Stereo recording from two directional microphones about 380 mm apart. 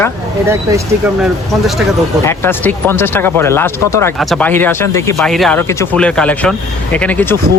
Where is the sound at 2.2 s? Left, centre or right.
Centre.